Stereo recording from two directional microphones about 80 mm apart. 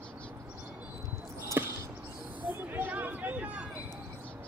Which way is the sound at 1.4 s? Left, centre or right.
Right.